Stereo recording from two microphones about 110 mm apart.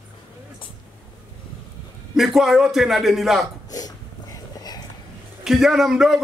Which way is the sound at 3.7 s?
35° left (ahead or behind).